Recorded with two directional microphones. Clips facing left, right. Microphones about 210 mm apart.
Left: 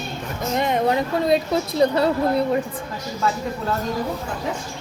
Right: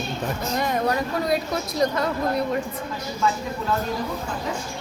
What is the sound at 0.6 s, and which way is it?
A woman's voice, 25° left (ahead or behind).